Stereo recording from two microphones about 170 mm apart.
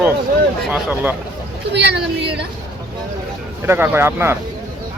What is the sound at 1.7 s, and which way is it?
Speech, 80° right.